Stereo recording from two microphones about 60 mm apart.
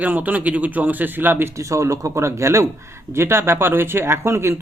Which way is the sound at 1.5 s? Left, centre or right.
Right.